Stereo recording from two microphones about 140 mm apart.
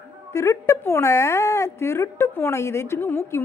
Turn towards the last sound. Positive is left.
turn(degrees=15)  # may be behind; listen again after turning